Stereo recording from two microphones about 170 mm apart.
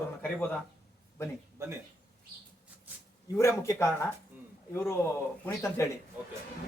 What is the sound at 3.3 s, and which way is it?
A man's voice, 15° left (ahead or behind).